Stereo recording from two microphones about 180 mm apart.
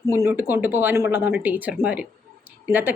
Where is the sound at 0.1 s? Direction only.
15° right (ahead or behind).